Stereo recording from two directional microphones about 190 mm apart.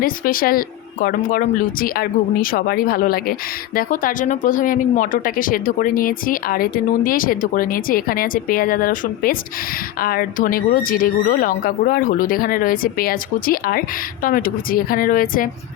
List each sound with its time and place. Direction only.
0.0 s speech: 50° left (ahead or behind)